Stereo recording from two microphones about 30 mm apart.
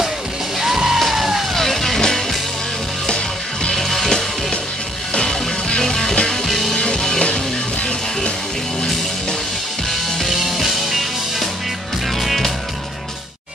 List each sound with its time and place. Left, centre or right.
0.6 s music: centre
1.5 s vehicle: centre
3.7 s music: centre
5.8 s music: centre
6.7 s music: left
10.1 s music: centre